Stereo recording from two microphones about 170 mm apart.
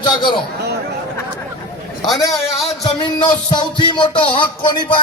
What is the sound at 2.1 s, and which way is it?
Speech, 20° left (ahead or behind).